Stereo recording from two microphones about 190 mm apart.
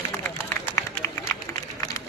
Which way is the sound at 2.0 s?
15° left (ahead or behind).